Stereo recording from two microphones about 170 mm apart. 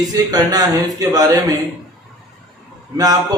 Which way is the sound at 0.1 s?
20° right (ahead or behind).